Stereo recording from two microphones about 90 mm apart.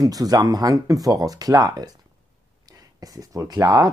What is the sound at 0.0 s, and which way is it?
Speech, 45° right (ahead or behind).